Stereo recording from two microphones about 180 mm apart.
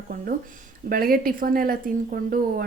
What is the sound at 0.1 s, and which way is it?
A woman's voice, 50° right (ahead or behind).